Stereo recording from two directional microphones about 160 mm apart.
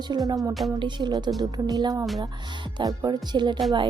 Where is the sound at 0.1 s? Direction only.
25° right (ahead or behind).